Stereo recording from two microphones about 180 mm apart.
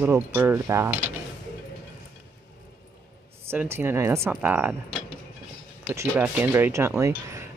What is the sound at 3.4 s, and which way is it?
Speech, 15° right (ahead or behind).